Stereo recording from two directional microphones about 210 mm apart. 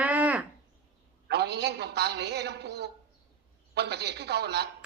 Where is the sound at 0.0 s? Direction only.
5° right (ahead or behind).